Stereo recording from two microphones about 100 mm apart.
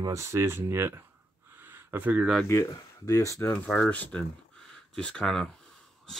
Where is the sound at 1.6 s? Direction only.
20° right (ahead or behind).